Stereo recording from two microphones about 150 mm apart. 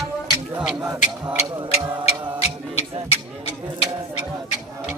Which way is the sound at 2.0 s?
45° left (ahead or behind).